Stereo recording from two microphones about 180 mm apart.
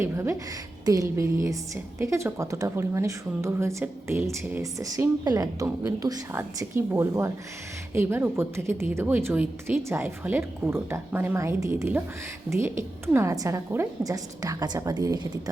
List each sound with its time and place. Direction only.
0.0 s a woman's voice: 15° right (ahead or behind)